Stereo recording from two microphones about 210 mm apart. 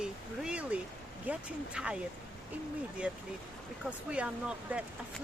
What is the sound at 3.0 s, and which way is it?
Speech, 5° right (ahead or behind).